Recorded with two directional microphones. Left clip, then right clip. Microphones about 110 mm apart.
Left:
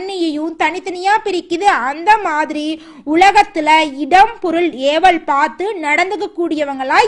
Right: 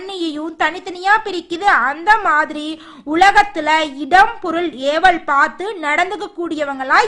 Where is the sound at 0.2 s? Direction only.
20° left (ahead or behind).